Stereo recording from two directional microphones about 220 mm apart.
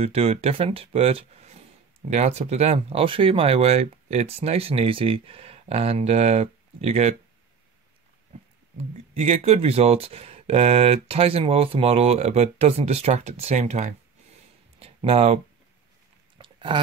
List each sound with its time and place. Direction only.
0.0 s speech: 30° right (ahead or behind)
8.7 s speech: 30° right (ahead or behind)
14.8 s a sound: 25° right (ahead or behind)